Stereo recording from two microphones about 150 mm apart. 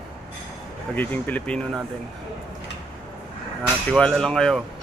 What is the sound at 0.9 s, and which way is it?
Speech, 10° left (ahead or behind).